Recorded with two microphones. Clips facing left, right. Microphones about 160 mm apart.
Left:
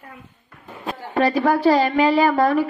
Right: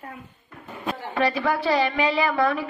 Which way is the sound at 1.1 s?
45° left (ahead or behind).